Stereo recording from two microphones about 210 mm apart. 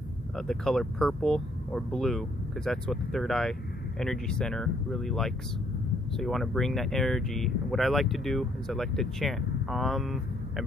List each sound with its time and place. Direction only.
0.4 s speech: centre (ahead or behind)